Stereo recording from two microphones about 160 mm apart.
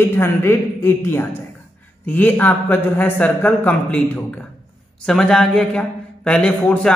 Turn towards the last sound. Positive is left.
turn(degrees=5)  # may be behind; listen again after turning